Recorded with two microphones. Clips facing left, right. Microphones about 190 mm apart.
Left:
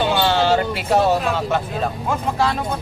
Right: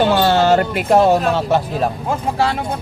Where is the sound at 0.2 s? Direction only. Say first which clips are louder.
Right 4 dB; 50° right (ahead or behind).